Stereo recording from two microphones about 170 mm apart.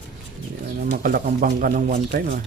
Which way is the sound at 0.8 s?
60° right (ahead or behind).